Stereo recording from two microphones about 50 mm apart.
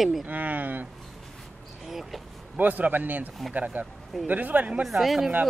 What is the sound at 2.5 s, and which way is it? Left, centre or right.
Speech, right.